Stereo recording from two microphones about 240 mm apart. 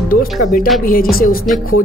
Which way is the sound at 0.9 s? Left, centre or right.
Left.